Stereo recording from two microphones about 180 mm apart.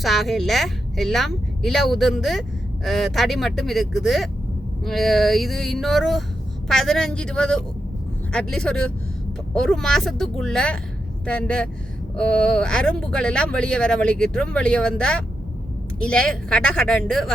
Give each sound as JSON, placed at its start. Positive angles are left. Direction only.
{"t": 0.0, "sound": "speech", "side_deg": 0}